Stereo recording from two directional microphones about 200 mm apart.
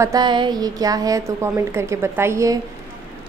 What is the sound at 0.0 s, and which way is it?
A woman's voice, 20° right (ahead or behind).